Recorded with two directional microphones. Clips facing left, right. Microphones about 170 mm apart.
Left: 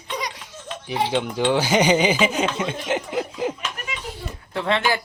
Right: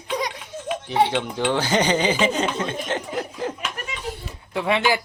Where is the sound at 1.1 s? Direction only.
5° left (ahead or behind).